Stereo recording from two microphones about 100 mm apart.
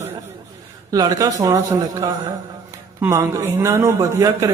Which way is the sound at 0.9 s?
35° right (ahead or behind).